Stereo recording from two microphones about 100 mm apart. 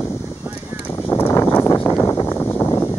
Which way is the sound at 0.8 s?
20° left (ahead or behind).